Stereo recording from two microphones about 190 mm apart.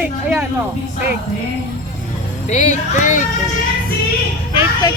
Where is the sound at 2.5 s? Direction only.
40° left (ahead or behind).